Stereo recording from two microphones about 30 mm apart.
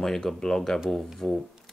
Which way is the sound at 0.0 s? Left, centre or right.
Centre.